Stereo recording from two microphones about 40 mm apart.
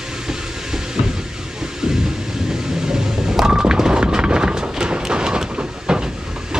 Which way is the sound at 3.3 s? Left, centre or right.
Centre.